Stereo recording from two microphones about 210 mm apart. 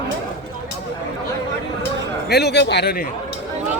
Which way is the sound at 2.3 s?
50° left (ahead or behind).